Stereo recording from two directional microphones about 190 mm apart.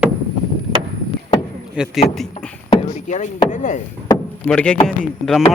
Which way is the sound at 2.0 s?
Centre (ahead or behind).